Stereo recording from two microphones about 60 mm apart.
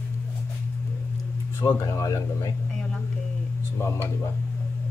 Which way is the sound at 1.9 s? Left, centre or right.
Left.